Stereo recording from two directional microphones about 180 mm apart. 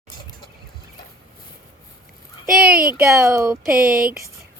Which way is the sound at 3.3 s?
15° right (ahead or behind).